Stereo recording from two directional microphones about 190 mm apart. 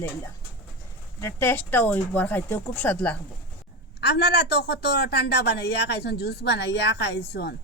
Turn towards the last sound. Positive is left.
turn(degrees=60)  # may be behind; listen again after turning